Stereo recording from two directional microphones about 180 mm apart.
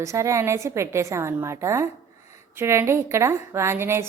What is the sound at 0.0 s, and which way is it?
A woman's voice, 15° right (ahead or behind).